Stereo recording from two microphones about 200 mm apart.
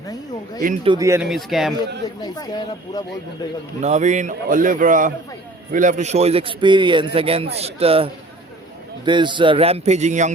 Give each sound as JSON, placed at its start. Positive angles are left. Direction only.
{"t": 0.9, "sound": "speech", "side_deg": -15}
{"t": 1.3, "sound": "a man's voice", "side_deg": 0}
{"t": 2.2, "sound": "speech", "side_deg": 20}
{"t": 3.8, "sound": "a man's voice", "side_deg": -35}